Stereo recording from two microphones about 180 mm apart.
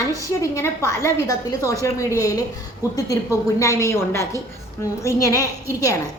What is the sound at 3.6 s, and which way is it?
A woman's voice, 15° left (ahead or behind).